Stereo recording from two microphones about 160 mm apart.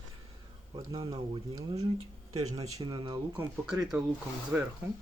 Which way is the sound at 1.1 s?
25° right (ahead or behind).